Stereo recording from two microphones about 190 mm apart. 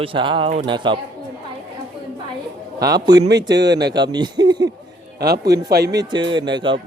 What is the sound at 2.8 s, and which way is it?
Speech, 20° right (ahead or behind).